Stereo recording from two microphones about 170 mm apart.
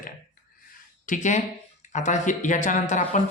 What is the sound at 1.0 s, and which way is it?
Speech, 50° left (ahead or behind).